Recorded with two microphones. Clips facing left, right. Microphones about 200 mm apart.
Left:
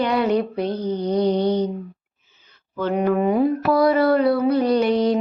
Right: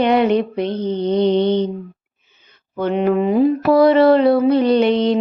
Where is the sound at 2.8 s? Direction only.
20° right (ahead or behind).